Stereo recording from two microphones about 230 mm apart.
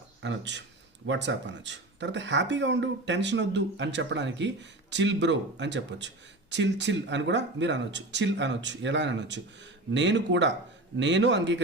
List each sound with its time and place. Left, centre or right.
0.2 s speech: right